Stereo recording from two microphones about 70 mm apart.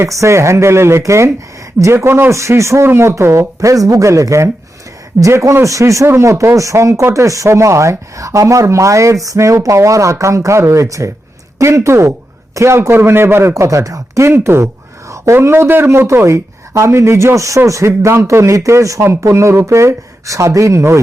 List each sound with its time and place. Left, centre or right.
0.0 s a man's voice: right
14.3 s a man's voice: right